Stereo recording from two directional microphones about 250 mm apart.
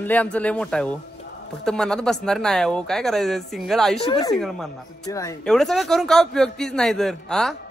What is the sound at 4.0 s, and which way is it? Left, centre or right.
Speech, centre.